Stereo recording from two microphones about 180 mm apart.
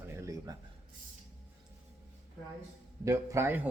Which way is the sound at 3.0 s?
15° right (ahead or behind).